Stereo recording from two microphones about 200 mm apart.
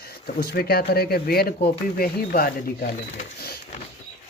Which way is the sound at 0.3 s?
50° left (ahead or behind).